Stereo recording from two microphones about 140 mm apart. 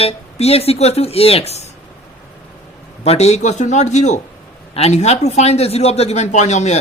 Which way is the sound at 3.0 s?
50° left (ahead or behind).